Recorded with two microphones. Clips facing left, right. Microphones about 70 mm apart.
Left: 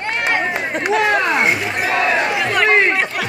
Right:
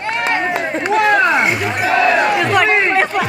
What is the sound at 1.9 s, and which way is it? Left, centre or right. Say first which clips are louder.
Speech: right 4 dB; centre.